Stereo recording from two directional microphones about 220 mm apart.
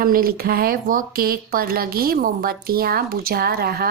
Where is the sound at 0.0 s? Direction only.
40° right (ahead or behind).